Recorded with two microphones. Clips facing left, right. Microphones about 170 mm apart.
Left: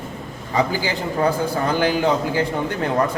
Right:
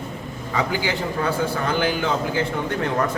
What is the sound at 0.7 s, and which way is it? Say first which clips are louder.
Speech: left 1 dB; 40° left (ahead or behind).